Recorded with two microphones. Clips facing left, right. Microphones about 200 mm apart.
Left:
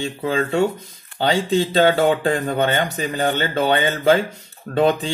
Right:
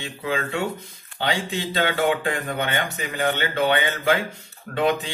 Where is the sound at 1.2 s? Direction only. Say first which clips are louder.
Left 7 dB; 35° left (ahead or behind).